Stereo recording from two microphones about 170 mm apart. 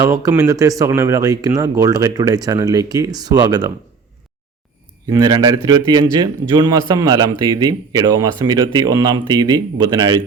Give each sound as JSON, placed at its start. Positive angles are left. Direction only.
{"t": 0.0, "sound": "a man's voice", "side_deg": -20}
{"t": 5.0, "sound": "a man's voice", "side_deg": -20}